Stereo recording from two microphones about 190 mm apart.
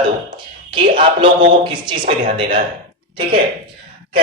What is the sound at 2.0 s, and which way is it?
Speech, 45° right (ahead or behind).